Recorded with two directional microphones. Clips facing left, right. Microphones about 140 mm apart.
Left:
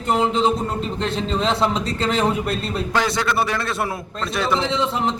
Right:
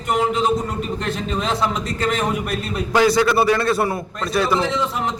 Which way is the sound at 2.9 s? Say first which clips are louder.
Right 7 dB; 5° right (ahead or behind).